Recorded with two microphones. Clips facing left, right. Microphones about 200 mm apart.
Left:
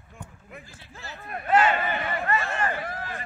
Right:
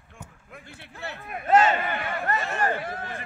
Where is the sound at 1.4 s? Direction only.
40° right (ahead or behind).